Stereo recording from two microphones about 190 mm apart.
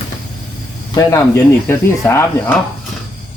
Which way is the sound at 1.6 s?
15° left (ahead or behind).